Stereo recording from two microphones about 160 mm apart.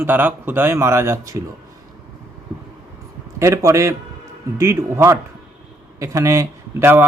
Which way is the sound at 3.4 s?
20° right (ahead or behind).